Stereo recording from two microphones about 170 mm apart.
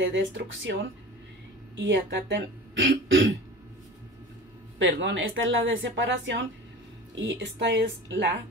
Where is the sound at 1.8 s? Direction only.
90° right.